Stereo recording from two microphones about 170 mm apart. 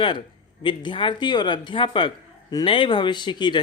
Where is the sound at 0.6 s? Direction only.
30° left (ahead or behind).